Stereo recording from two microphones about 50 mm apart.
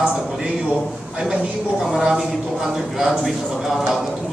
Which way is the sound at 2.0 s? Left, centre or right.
Centre.